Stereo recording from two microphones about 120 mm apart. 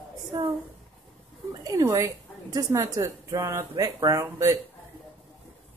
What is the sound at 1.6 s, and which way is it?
Speech, 25° right (ahead or behind).